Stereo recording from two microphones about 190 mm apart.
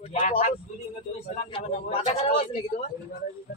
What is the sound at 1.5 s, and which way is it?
Speech, 30° left (ahead or behind).